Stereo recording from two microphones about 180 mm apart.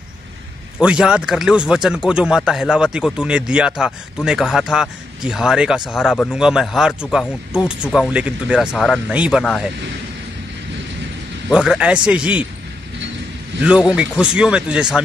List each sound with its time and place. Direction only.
0.7 s speech: 5° right (ahead or behind)
11.4 s speech: 5° right (ahead or behind)
13.6 s speech: 5° right (ahead or behind)